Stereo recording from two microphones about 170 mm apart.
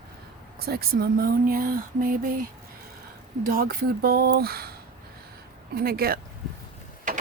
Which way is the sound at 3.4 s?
60° right (ahead or behind).